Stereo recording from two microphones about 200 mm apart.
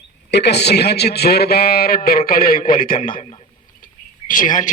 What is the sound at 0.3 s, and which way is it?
A man's voice, 55° left (ahead or behind).